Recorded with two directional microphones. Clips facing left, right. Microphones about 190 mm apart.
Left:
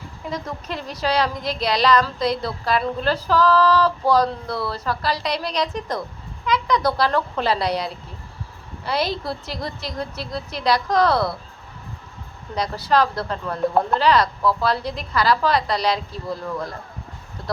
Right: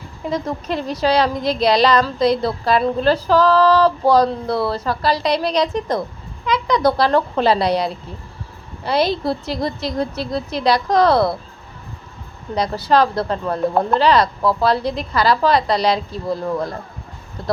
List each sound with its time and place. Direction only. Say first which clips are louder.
0.3 s speech: right 7 dB; 25° right (ahead or behind)
12.5 s speech: right 4 dB; 25° right (ahead or behind)